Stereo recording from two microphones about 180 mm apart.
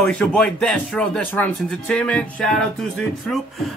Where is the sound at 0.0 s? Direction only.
5° left (ahead or behind).